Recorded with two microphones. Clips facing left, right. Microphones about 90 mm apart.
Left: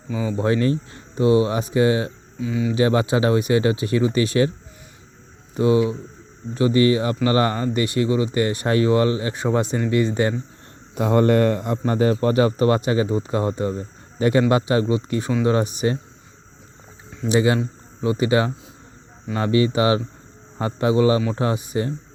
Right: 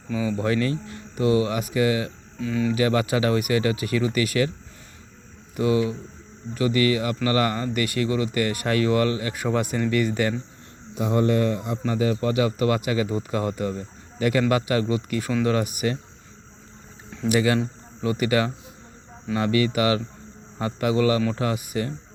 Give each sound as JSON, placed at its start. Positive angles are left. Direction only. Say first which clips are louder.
{"t": 0.3, "sound": "speech", "louder": "left 4 dB", "side_deg": 25}
{"t": 2.4, "sound": "speech", "louder": "left 1 dB", "side_deg": 10}
{"t": 2.7, "sound": "speech", "louder": "left 5 dB", "side_deg": 25}
{"t": 5.5, "sound": "speech", "louder": "left 4 dB", "side_deg": 25}
{"t": 10.9, "sound": "a man's voice", "louder": "left 4 dB", "side_deg": 60}
{"t": 17.2, "sound": "speech", "louder": "left 2 dB", "side_deg": 25}